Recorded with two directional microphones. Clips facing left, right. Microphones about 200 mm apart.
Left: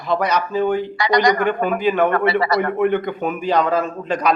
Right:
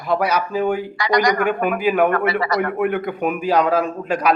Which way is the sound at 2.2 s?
30° left (ahead or behind).